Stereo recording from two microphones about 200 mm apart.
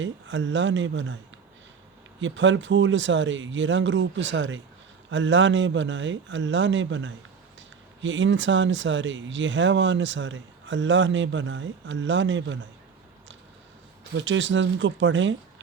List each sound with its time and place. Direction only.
0.0 s speech: 70° right (ahead or behind)
2.2 s speech: 70° right (ahead or behind)
14.2 s speech: 70° right (ahead or behind)